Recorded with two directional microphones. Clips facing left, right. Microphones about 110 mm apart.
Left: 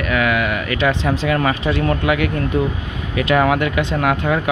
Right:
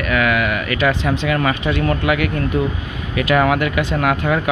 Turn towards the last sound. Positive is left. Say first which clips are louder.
# even
turn(degrees=25)  # may be behind; listen again after turning